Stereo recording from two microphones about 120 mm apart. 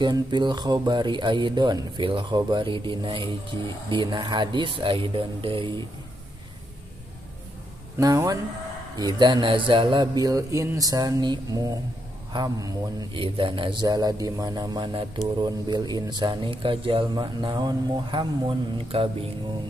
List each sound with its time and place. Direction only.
0.0 s speech: 40° right (ahead or behind)
8.0 s speech: 30° right (ahead or behind)
13.2 s speech: 45° right (ahead or behind)
18.9 s mantra: 50° right (ahead or behind)